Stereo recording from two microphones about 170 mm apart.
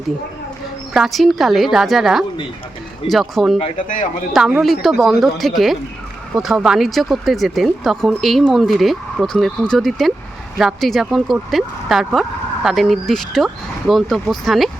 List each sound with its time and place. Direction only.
0.9 s speech: centre (ahead or behind)
3.6 s speech: 50° left (ahead or behind)
4.3 s speech: 5° right (ahead or behind)